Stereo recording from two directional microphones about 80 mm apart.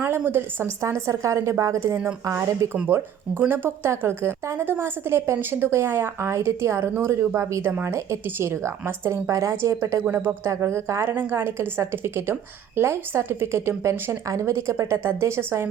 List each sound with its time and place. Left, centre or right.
0.0 s a woman's voice: right
2.7 s a woman's voice: right
7.7 s a woman's voice: right
10.0 s a woman's voice: right